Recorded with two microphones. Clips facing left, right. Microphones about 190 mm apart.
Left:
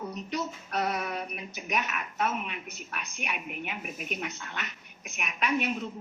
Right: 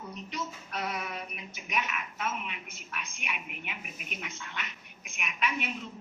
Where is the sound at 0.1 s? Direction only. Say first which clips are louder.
Left 5 dB; 40° left (ahead or behind).